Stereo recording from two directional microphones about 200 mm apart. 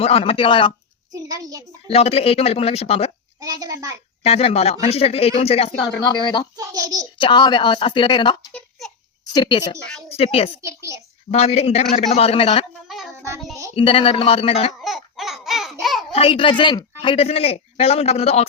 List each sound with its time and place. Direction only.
0.0 s a woman's voice: 30° left (ahead or behind)
1.1 s a sound: 15° right (ahead or behind)
1.9 s a woman's voice: 30° left (ahead or behind)
3.4 s a sound: 20° right (ahead or behind)
4.2 s a woman's voice: 30° left (ahead or behind)
6.6 s a child's voice: 15° right (ahead or behind)
7.2 s a woman's voice: 25° left (ahead or behind)
10.6 s a child's voice: 15° right (ahead or behind)
11.3 s a man's voice: 30° left (ahead or behind)
12.9 s child singing: centre (ahead or behind)
13.7 s a woman's voice: 25° left (ahead or behind)
14.8 s babbling: centre (ahead or behind)
16.1 s a woman's voice: 30° left (ahead or behind)